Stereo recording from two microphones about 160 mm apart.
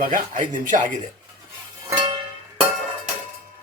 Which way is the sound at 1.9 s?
25° right (ahead or behind).